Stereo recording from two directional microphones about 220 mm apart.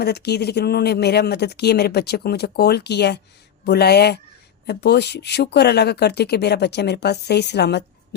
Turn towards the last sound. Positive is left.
turn(degrees=50)  # may be behind; listen again after turning